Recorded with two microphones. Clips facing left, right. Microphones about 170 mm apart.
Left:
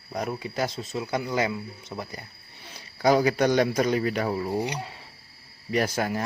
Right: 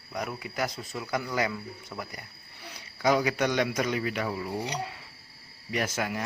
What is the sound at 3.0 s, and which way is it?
Cutlery, 35° left (ahead or behind).